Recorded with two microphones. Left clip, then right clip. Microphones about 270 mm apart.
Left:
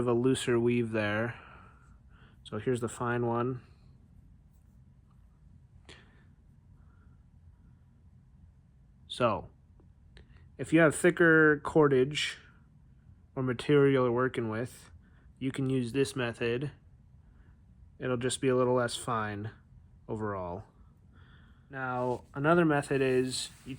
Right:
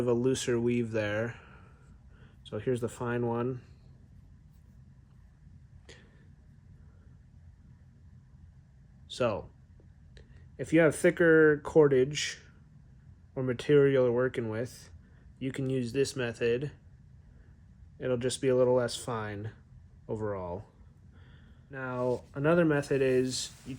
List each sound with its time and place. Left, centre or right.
0.0 s speech: centre
9.0 s a sound: left
10.2 s speech: left
17.9 s speech: left